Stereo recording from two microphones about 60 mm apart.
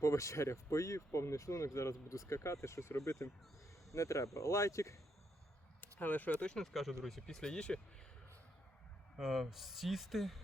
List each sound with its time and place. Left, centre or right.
0.0 s speech: left
5.8 s speech: left
7.0 s speech: centre
9.1 s speech: centre